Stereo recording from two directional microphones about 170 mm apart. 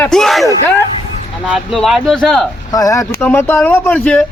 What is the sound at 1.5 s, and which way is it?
Speech, centre (ahead or behind).